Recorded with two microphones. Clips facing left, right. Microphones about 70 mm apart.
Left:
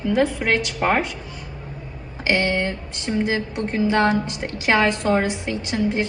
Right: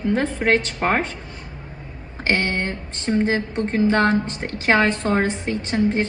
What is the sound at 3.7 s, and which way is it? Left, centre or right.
A woman's voice, right.